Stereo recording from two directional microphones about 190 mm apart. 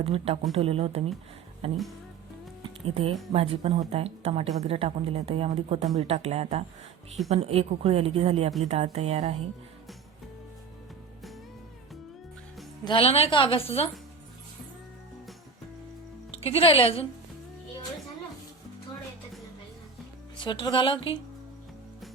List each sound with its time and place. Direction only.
0.0 s speech: 30° right (ahead or behind)
1.6 s music: 30° right (ahead or behind)
3.3 s speech: 30° right (ahead or behind)
12.8 s a woman's voice: 30° left (ahead or behind)
16.3 s a woman's voice: 30° left (ahead or behind)
20.4 s a woman's voice: 25° left (ahead or behind)